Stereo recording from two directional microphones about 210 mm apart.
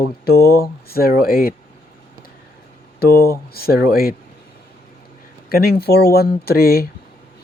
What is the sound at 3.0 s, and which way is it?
Speech, 45° left (ahead or behind).